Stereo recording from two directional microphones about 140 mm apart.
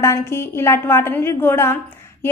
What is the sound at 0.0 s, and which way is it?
A woman's voice, 20° left (ahead or behind).